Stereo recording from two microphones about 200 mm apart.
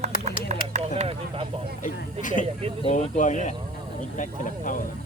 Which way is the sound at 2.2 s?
40° left (ahead or behind).